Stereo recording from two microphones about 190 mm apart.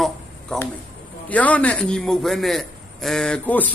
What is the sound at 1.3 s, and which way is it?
A man's voice, 10° left (ahead or behind).